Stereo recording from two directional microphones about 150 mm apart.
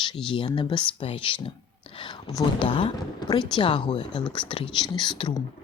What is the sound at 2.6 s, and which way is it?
Speech, 35° left (ahead or behind).